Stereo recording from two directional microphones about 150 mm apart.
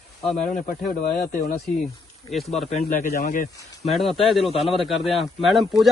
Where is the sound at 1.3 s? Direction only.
60° left (ahead or behind).